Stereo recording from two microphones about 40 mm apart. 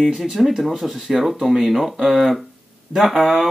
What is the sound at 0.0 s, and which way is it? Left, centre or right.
Speech, centre.